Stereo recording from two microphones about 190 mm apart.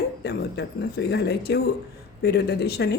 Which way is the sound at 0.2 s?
60° left (ahead or behind).